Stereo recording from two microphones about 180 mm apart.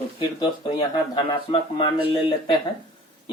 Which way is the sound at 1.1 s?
25° left (ahead or behind).